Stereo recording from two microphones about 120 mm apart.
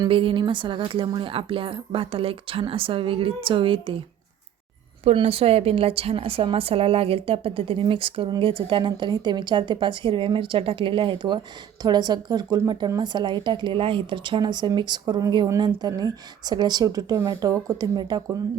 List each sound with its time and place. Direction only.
0.1 s speech: 50° right (ahead or behind)
5.1 s a woman's voice: 55° right (ahead or behind); by 18.2 s 35° right (ahead or behind)